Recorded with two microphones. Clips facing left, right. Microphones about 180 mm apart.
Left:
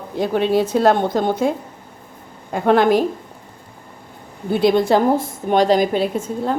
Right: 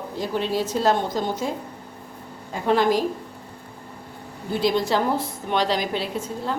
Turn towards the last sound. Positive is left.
turn(degrees=50)  # may be behind; listen again after turning